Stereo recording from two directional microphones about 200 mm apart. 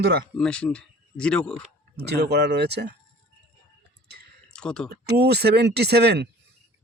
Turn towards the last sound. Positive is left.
turn(degrees=-55)  # may be behind; listen again after turning